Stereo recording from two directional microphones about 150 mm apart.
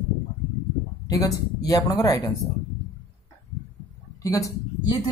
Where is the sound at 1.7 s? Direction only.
25° left (ahead or behind).